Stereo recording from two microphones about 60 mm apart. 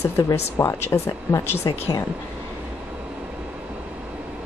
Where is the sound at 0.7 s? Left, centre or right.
Left.